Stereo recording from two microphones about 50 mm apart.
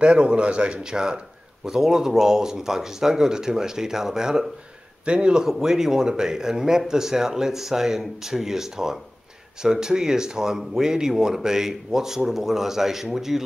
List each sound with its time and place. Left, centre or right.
0.0 s speech: right